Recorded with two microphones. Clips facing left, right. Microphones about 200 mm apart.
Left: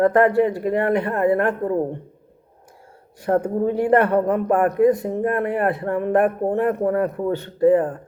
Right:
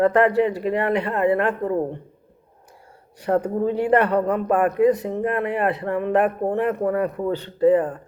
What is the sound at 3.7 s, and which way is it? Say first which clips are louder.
Speech: left 2 dB; 50° left (ahead or behind).